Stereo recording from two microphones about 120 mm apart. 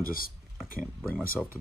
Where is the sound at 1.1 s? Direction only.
15° left (ahead or behind).